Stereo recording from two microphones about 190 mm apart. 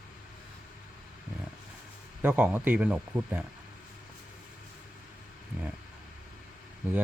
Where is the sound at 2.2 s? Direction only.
10° right (ahead or behind).